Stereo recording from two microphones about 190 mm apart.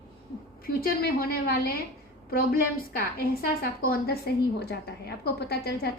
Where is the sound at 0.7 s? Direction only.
50° left (ahead or behind).